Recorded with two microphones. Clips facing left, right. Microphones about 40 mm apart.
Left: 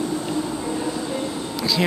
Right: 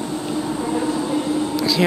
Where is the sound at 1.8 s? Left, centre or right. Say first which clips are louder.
Right 4 dB; centre.